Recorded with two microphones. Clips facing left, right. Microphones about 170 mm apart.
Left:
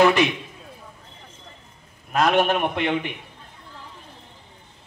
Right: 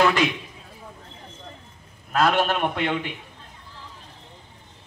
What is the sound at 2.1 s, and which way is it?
Speech, 15° left (ahead or behind).